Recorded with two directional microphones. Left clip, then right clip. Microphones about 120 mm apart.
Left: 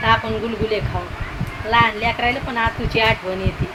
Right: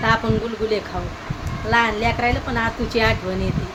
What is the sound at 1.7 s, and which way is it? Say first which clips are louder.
Speech: left 2 dB; 25° right (ahead or behind).